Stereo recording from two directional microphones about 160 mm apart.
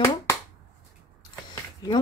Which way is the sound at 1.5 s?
30° left (ahead or behind).